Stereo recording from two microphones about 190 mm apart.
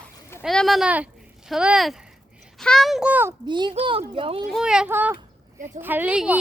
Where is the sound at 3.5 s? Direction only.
25° right (ahead or behind).